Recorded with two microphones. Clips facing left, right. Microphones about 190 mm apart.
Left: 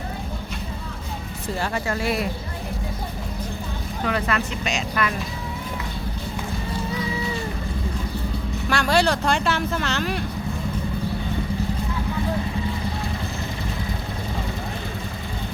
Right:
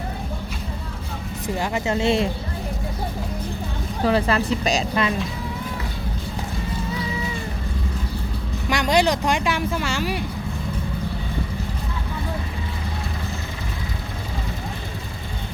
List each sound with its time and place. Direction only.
1.5 s speech: 15° right (ahead or behind)
4.0 s a woman's voice: 30° right (ahead or behind)
8.7 s speech: 15° right (ahead or behind)